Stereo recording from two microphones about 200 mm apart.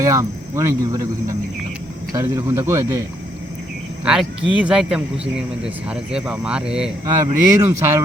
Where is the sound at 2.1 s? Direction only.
15° right (ahead or behind).